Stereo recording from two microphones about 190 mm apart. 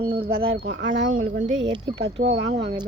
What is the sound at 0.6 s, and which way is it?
Speech, 70° right (ahead or behind).